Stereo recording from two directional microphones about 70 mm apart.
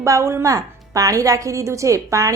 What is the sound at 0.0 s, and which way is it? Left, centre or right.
A woman's voice, right.